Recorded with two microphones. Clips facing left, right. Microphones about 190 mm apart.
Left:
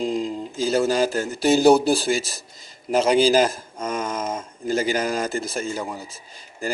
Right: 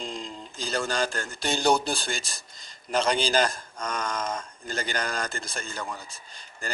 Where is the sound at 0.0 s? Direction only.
5° left (ahead or behind).